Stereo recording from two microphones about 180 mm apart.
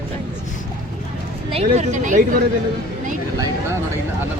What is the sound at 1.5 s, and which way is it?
Speech, 35° right (ahead or behind).